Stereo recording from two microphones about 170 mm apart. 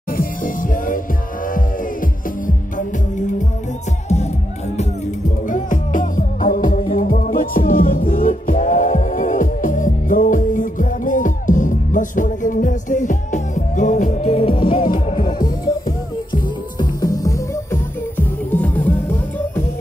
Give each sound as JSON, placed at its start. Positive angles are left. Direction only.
{"t": 0.1, "sound": "music", "side_deg": 55}
{"t": 5.5, "sound": "music", "side_deg": 50}
{"t": 16.7, "sound": "music", "side_deg": 20}